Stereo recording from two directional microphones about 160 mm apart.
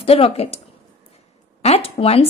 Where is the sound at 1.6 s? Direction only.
40° left (ahead or behind).